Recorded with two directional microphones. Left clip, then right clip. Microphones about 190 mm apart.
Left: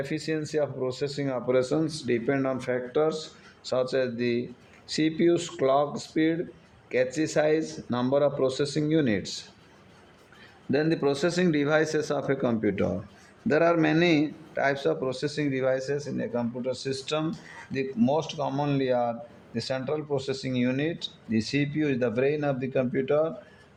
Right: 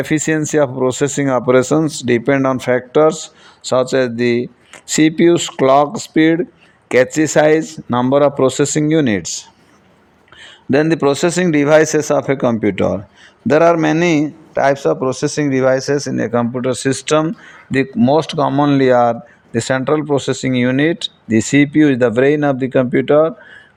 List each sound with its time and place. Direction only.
0.0 s a man's voice: 50° right (ahead or behind)
10.7 s a man's voice: 50° right (ahead or behind)